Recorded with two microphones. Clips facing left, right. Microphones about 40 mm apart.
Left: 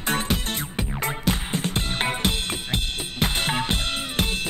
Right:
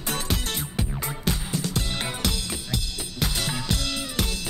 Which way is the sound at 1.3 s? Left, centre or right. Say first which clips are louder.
Even; left.